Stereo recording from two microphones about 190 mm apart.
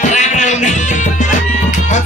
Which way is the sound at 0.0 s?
40° left (ahead or behind).